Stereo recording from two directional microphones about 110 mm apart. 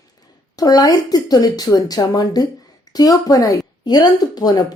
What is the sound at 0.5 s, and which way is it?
Speech, 35° left (ahead or behind).